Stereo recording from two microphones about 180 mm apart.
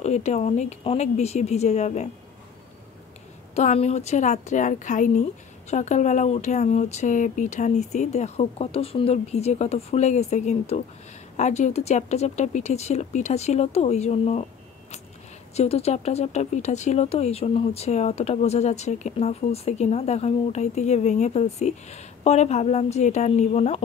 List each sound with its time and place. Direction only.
0.0 s speech: 40° left (ahead or behind)
3.5 s speech: 35° left (ahead or behind)